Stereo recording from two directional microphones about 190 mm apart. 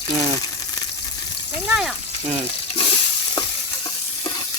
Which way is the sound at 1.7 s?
Centre (ahead or behind).